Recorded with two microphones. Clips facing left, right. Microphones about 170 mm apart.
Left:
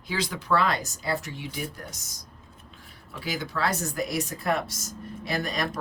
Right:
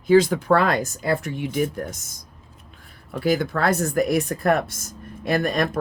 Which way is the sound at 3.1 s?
50° right (ahead or behind).